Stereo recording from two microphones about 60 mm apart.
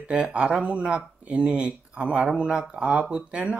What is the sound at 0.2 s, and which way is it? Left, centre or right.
Speech, centre.